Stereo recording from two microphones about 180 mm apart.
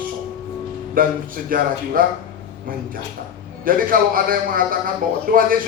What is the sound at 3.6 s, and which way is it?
A man's voice, 50° right (ahead or behind).